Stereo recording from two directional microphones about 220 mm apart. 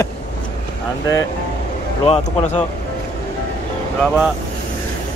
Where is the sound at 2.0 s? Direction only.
25° left (ahead or behind).